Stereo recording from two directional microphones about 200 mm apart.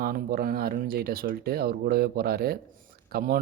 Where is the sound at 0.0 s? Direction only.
50° right (ahead or behind).